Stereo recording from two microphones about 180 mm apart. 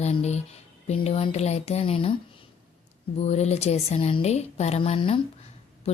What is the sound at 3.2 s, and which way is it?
Speech, 35° left (ahead or behind).